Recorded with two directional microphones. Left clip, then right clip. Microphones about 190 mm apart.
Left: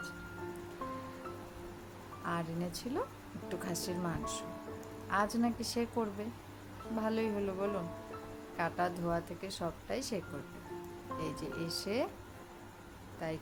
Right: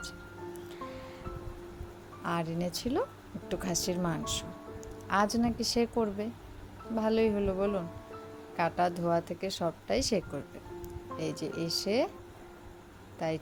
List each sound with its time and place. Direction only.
2.2 s speech: 30° right (ahead or behind)
13.1 s speech: 25° right (ahead or behind)